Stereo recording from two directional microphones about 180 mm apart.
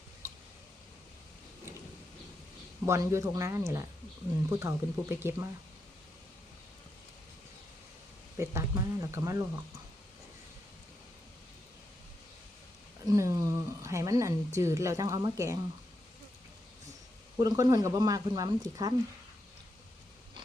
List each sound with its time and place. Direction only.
2.8 s a woman's voice: 15° right (ahead or behind)
8.4 s a woman's voice: 15° right (ahead or behind)
13.1 s a woman's voice: 15° right (ahead or behind)
17.4 s speech: 20° right (ahead or behind)